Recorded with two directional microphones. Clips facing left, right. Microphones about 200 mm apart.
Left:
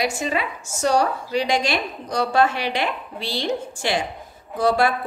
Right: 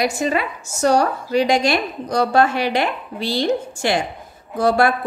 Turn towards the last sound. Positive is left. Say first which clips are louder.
# right 3 dB
turn(degrees=-50)  # may be behind; listen again after turning